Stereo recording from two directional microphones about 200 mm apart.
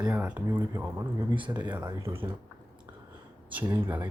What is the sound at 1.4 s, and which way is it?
Speech, 20° right (ahead or behind).